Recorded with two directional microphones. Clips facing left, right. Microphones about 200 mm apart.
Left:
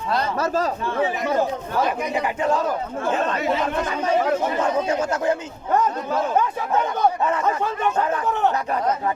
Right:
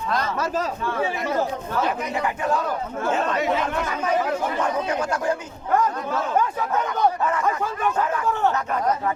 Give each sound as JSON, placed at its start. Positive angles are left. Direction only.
{"t": 0.1, "sound": "a man's voice", "side_deg": 30}
{"t": 2.1, "sound": "speech", "side_deg": 25}
{"t": 4.6, "sound": "speech", "side_deg": 25}